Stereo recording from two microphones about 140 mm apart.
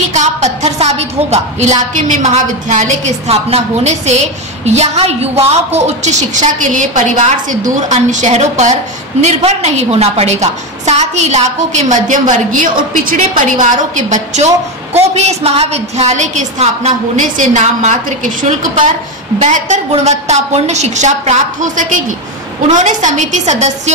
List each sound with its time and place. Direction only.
0.1 s a woman's voice: 55° right (ahead or behind)